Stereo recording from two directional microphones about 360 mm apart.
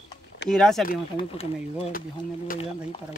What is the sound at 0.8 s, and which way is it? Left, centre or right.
Speech, centre.